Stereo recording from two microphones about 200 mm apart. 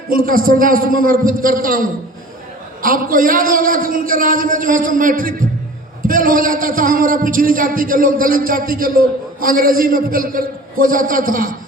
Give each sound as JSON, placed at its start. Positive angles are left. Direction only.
{"t": 0.1, "sound": "a man's voice", "side_deg": -45}